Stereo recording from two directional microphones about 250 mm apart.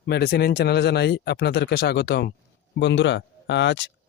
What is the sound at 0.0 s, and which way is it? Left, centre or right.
Speech, left.